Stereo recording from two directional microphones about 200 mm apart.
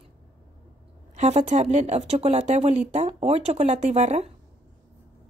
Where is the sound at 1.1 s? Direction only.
35° right (ahead or behind).